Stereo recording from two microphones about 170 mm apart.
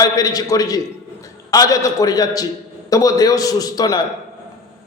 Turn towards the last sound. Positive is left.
turn(degrees=25)  # may be behind; listen again after turning